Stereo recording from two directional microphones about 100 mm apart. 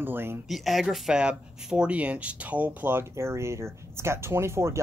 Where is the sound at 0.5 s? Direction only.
Centre (ahead or behind).